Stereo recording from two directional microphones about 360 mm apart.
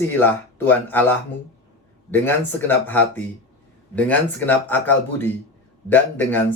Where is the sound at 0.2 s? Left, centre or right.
Centre.